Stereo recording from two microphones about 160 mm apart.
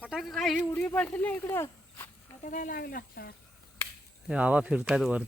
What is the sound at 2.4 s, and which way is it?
Speech, 55° left (ahead or behind).